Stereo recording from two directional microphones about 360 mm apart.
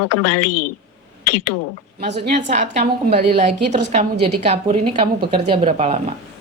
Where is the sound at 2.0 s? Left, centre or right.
Right.